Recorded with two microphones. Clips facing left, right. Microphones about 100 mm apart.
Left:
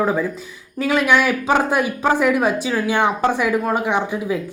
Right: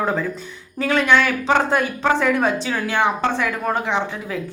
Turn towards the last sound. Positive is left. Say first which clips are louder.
# left 3 dB
turn(degrees=15)  # may be behind; listen again after turning